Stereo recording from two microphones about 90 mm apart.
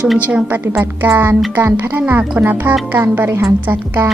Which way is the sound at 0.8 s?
20° right (ahead or behind).